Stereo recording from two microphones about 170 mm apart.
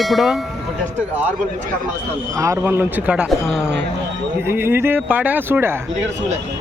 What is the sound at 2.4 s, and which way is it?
Speech, 15° right (ahead or behind).